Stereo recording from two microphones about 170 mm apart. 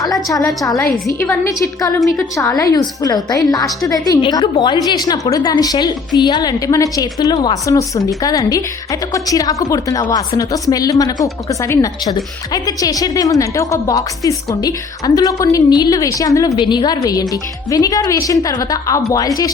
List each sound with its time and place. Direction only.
0.0 s a woman's voice: 20° left (ahead or behind)